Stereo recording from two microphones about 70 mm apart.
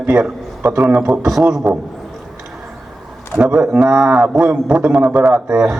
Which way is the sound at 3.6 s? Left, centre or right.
Centre.